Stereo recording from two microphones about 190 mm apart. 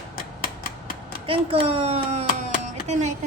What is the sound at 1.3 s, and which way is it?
A child's voice, 30° right (ahead or behind).